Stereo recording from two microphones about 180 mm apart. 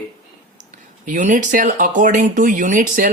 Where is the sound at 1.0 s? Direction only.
45° right (ahead or behind).